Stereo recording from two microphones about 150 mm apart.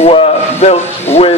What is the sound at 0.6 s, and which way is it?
Speech, 45° left (ahead or behind).